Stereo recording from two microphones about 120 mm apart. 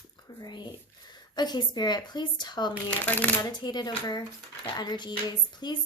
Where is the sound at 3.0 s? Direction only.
15° left (ahead or behind).